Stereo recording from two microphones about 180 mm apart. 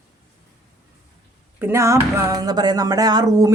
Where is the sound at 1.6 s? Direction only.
15° right (ahead or behind).